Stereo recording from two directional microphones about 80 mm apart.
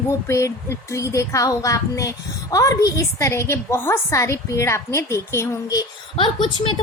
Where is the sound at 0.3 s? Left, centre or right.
Left.